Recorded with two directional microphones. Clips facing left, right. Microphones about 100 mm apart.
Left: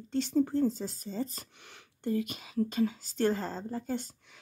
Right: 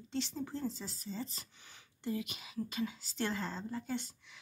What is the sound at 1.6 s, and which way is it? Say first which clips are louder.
Speech: left 5 dB; 65° left (ahead or behind).